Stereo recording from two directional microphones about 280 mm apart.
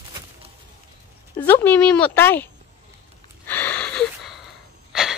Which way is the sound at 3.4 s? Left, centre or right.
Centre.